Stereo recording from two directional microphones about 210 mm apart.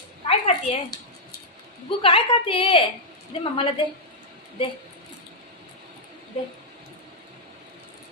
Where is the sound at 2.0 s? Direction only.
25° left (ahead or behind).